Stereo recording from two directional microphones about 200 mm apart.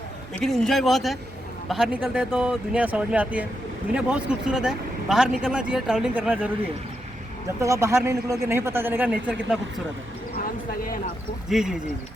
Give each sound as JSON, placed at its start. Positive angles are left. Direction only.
{"t": 0.3, "sound": "speech", "side_deg": 0}
{"t": 7.6, "sound": "speech", "side_deg": -15}
{"t": 10.8, "sound": "speech", "side_deg": 45}
{"t": 11.4, "sound": "speech", "side_deg": 0}